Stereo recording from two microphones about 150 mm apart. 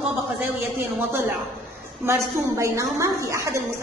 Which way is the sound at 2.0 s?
20° right (ahead or behind).